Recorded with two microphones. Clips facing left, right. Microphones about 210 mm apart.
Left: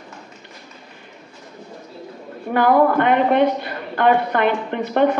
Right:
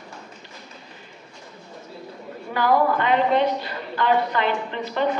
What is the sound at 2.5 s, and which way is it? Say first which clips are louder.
A woman's voice: left 5 dB; 55° left (ahead or behind).